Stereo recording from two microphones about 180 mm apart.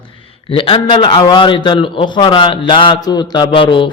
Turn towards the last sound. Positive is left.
turn(degrees=30)  # may be behind; listen again after turning